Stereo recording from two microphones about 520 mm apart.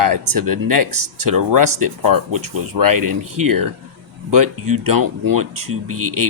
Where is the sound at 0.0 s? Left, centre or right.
Right.